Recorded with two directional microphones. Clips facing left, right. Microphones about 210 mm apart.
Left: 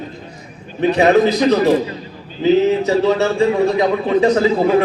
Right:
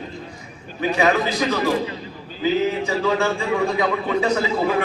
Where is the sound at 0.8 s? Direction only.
35° left (ahead or behind).